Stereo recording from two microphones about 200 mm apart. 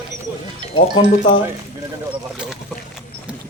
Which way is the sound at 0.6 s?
25° right (ahead or behind).